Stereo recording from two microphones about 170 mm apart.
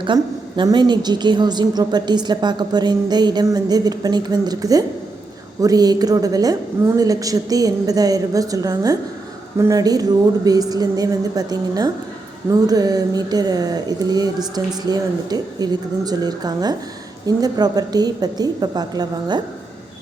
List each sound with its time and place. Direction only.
0.0 s a woman's voice: 30° right (ahead or behind)